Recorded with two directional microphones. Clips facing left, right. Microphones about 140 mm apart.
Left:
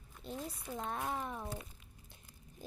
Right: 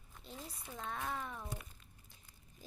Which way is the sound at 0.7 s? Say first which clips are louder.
Left 3 dB; 20° left (ahead or behind).